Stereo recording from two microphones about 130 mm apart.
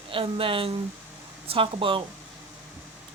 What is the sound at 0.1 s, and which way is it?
Speech, 45° right (ahead or behind).